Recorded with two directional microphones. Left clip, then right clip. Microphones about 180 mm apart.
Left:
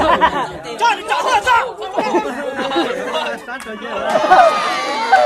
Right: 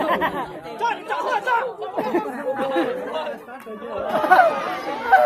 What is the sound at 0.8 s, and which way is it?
Speech, 35° left (ahead or behind).